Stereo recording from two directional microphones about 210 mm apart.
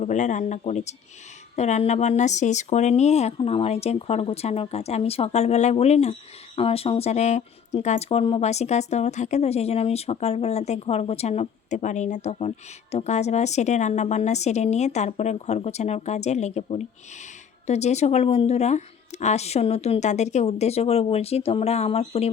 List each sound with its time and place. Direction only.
0.0 s speech: 35° left (ahead or behind)